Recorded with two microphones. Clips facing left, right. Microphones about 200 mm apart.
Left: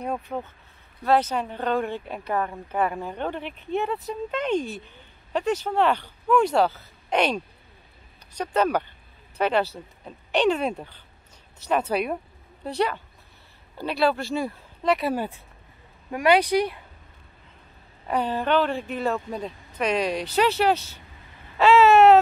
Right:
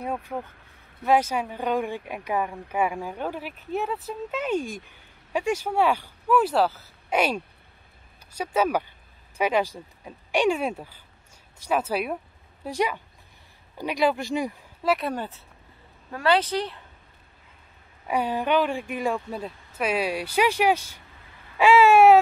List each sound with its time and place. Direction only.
0.0 s speech: 5° right (ahead or behind)
14.8 s speech: centre (ahead or behind)
18.0 s speech: 10° right (ahead or behind)
21.5 s a sound: 10° right (ahead or behind)